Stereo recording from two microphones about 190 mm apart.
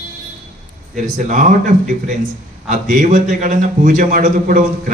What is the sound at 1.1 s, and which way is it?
Speech, 40° right (ahead or behind).